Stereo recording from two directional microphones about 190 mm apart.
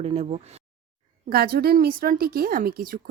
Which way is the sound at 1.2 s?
55° right (ahead or behind).